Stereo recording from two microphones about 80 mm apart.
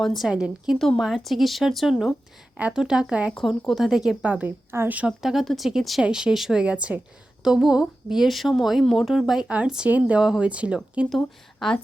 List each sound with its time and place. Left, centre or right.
0.0 s a woman's voice: centre
0.3 s a woman's voice: centre
0.8 s a woman's voice: centre
3.7 s a woman's voice: centre
4.2 s a woman's voice: centre
5.2 s a woman's voice: centre